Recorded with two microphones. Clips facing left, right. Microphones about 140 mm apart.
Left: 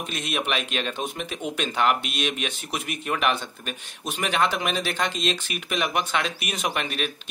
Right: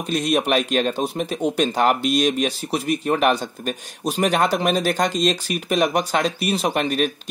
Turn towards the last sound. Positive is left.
turn(degrees=-40)  # may be behind; listen again after turning